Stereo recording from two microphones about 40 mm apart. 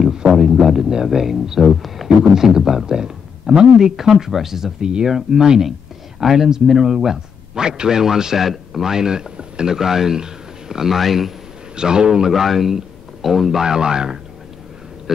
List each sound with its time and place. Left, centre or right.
0.2 s a man's voice: centre
11.7 s a man's voice: centre
12.3 s a man's voice: centre